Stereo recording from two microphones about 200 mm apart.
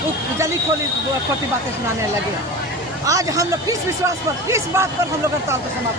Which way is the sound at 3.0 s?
15° right (ahead or behind).